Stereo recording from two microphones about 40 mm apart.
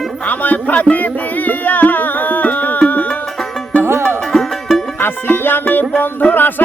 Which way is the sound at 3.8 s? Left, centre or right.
Right.